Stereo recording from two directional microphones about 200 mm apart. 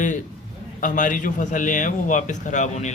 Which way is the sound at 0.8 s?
40° left (ahead or behind).